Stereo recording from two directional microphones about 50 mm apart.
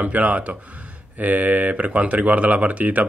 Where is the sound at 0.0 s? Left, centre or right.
Right.